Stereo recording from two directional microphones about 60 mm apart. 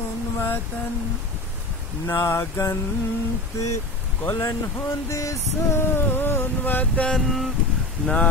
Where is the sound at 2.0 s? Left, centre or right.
Left.